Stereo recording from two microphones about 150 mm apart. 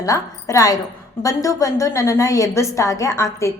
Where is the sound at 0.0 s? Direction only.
20° left (ahead or behind).